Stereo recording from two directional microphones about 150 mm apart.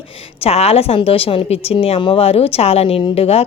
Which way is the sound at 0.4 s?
40° left (ahead or behind).